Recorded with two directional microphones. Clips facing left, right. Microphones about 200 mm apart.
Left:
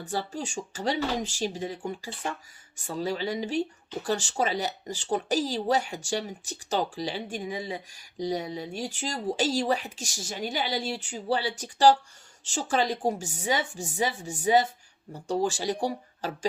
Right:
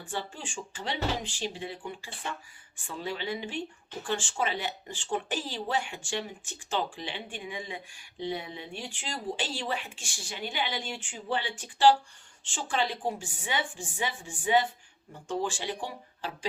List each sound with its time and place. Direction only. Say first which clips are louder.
0.0 s speech: left 5 dB; 40° left (ahead or behind)